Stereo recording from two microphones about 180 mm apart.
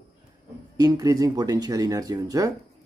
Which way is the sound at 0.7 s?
20° right (ahead or behind).